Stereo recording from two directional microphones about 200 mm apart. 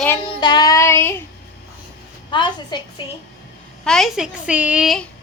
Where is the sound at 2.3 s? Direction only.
25° left (ahead or behind).